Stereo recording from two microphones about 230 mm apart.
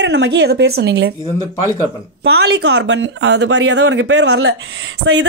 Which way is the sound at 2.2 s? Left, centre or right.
Right.